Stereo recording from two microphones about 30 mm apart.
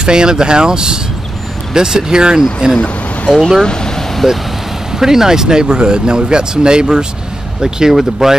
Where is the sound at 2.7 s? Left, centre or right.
Left.